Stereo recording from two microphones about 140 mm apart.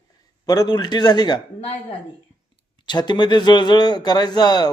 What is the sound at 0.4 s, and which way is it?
Speech, 25° left (ahead or behind).